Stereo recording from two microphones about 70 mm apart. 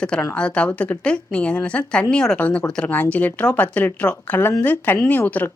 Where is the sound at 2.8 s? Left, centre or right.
Left.